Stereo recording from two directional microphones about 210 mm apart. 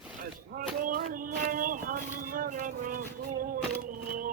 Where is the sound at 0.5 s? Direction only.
40° right (ahead or behind).